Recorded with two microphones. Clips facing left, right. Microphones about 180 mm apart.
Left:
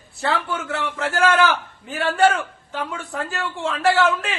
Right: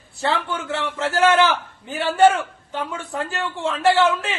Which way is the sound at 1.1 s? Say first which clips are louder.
Right 2 dB; 20° right (ahead or behind).